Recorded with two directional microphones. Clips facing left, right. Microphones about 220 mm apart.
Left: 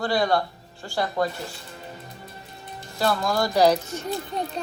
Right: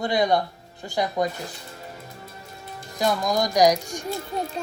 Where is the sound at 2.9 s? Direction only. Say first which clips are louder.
Even; 15° right (ahead or behind).